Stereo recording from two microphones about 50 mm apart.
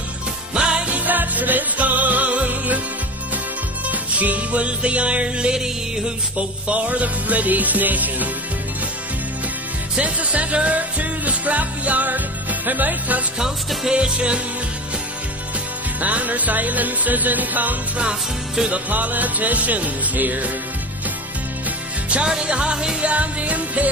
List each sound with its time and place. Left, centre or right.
0.8 s music: right
3.8 s music: right
5.5 s music: centre
6.3 s music: right
9.9 s music: right
13.9 s music: right
16.0 s music: right
22.1 s music: centre